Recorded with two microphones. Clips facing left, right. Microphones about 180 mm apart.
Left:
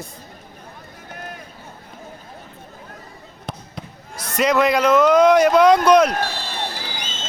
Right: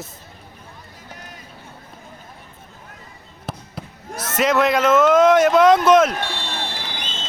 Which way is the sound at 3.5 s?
5° right (ahead or behind).